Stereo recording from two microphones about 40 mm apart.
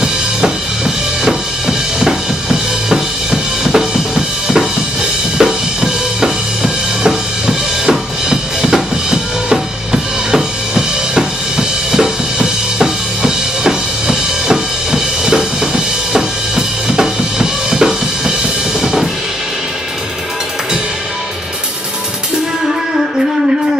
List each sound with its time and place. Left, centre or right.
0.0 s drum kit: centre
2.9 s music: centre
8.3 s drum kit: centre
10.3 s drum: centre
18.8 s drum kit: centre